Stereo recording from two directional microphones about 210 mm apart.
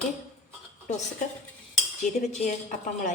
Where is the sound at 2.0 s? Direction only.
35° left (ahead or behind).